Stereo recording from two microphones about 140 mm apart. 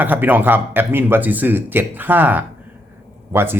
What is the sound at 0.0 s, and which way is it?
Speech, 15° right (ahead or behind).